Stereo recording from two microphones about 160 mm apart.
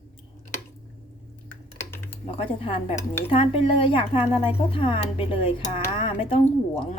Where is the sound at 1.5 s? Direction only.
15° left (ahead or behind).